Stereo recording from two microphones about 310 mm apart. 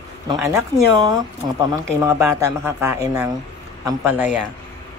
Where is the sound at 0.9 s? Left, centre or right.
Centre.